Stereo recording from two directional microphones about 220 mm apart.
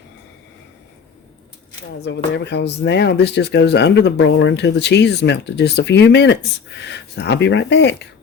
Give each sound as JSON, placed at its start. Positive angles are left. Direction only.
{"t": 2.0, "sound": "speech", "side_deg": 50}